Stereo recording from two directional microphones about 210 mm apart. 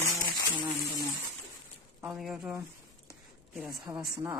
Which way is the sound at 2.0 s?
5° right (ahead or behind).